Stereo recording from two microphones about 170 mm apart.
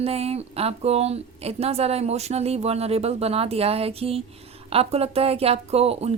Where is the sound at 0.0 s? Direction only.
35° right (ahead or behind).